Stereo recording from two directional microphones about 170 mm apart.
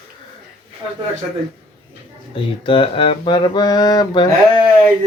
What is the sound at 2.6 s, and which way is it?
Mantra, 30° left (ahead or behind).